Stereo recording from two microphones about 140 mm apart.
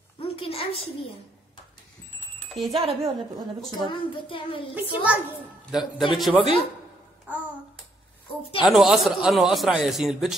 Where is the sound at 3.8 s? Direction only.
35° left (ahead or behind).